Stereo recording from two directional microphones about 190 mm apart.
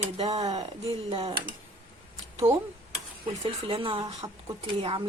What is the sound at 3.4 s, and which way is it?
Speech, 25° right (ahead or behind).